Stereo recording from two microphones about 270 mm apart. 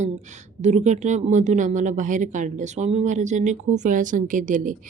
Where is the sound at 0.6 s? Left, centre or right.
Right.